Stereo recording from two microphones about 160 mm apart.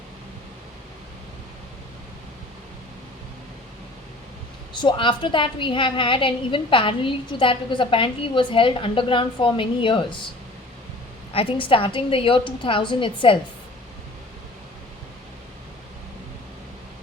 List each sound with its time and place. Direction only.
4.7 s a woman's voice: 30° left (ahead or behind)
11.3 s a woman's voice: 35° left (ahead or behind)